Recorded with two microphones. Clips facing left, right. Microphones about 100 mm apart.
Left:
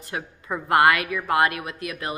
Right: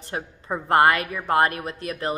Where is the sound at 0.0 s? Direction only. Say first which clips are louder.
Right 1 dB; 30° right (ahead or behind).